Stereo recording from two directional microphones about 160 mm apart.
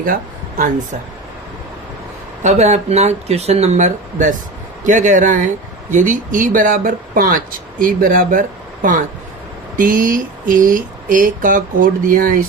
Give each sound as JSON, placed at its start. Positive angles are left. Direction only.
{"t": 2.4, "sound": "speech", "side_deg": -45}